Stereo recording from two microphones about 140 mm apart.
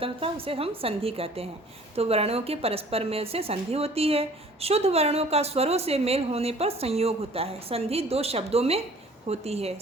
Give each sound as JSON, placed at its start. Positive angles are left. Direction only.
{"t": 0.0, "sound": "a woman's voice", "side_deg": -40}